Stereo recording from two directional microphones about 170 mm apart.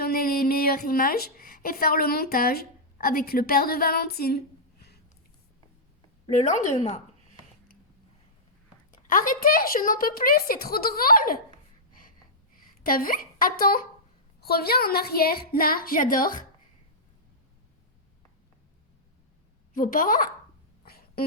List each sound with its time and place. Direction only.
0.0 s a woman's voice: 60° left (ahead or behind)
6.2 s a woman's voice: 40° left (ahead or behind)
8.9 s a woman's voice: 50° left (ahead or behind)
12.5 s a woman's voice: 60° left (ahead or behind)
19.7 s a woman's voice: 55° left (ahead or behind)
20.8 s a sound: 65° left (ahead or behind)